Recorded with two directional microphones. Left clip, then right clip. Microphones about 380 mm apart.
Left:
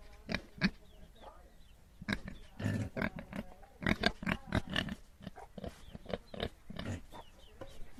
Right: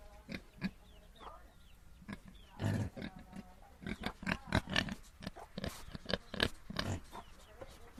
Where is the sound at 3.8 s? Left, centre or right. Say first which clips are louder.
Left 11 dB; centre.